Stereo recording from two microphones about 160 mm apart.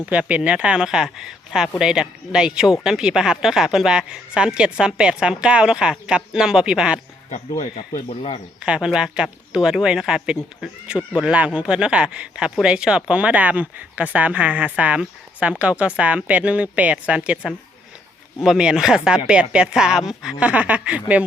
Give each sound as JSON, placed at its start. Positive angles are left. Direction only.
{"t": 0.0, "sound": "speech", "side_deg": -10}
{"t": 7.3, "sound": "speech", "side_deg": 50}
{"t": 8.6, "sound": "speech", "side_deg": -5}